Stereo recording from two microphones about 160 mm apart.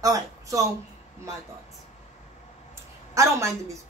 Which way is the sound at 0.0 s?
20° right (ahead or behind).